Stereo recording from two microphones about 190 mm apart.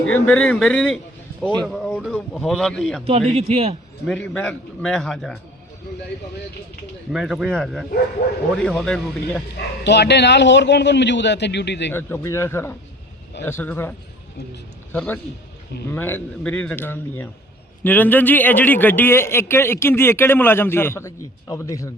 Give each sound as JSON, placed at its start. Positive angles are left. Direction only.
{"t": 0.0, "sound": "a man's voice", "side_deg": 5}
{"t": 3.0, "sound": "speech", "side_deg": -30}
{"t": 4.0, "sound": "a man's voice", "side_deg": 5}
{"t": 7.1, "sound": "a man's voice", "side_deg": 0}
{"t": 8.2, "sound": "a man's voice", "side_deg": 60}
{"t": 8.5, "sound": "a man's voice", "side_deg": 5}
{"t": 9.8, "sound": "a man's voice", "side_deg": 65}
{"t": 11.9, "sound": "a man's voice", "side_deg": 10}
{"t": 14.9, "sound": "a man's voice", "side_deg": 10}